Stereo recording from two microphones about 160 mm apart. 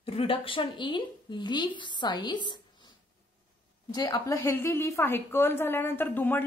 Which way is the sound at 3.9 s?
25° left (ahead or behind).